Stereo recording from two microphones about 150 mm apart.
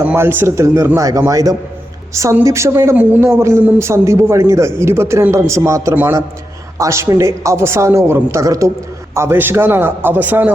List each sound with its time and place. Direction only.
0.0 s a man's voice: 10° right (ahead or behind)